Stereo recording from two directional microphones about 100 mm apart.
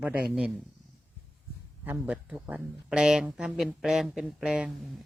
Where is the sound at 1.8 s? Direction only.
15° right (ahead or behind).